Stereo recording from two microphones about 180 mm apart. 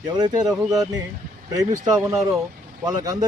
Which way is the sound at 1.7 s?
20° right (ahead or behind).